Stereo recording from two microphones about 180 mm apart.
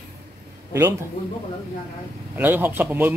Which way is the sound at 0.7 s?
15° right (ahead or behind).